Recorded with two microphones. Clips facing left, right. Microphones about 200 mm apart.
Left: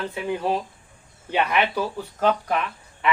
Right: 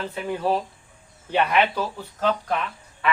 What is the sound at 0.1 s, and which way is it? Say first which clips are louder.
Speech: even; 15° left (ahead or behind).